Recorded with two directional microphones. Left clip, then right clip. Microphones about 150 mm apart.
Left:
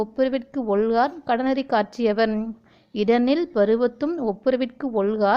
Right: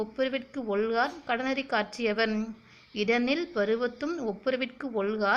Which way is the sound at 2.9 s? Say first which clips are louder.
Left 7 dB; 55° left (ahead or behind).